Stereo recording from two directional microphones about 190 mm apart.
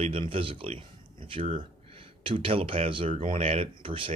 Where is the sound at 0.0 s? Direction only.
30° right (ahead or behind).